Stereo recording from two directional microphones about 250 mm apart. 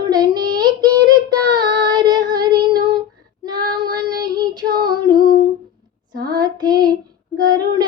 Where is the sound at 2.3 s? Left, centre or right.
Centre.